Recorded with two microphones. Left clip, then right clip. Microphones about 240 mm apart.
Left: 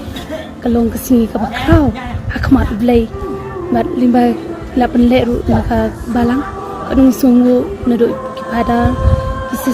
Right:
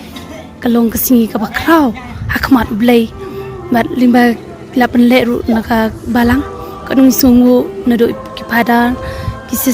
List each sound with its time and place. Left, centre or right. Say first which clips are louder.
0.6 s a woman's voice: right 3 dB; right